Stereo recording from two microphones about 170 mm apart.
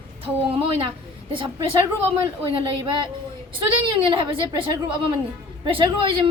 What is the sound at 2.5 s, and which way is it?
A woman's voice, 30° right (ahead or behind).